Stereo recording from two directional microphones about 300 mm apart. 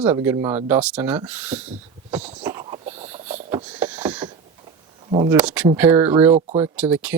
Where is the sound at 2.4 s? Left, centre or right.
Centre.